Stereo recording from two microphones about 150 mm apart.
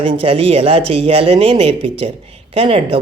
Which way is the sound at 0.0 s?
40° right (ahead or behind).